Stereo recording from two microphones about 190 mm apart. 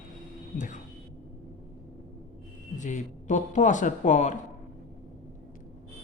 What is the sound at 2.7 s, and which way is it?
A woman's voice, 40° left (ahead or behind).